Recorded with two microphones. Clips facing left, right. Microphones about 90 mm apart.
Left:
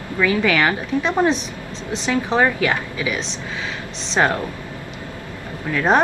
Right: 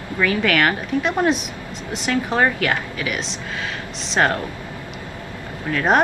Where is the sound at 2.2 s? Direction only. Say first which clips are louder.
Left 2 dB; 5° right (ahead or behind).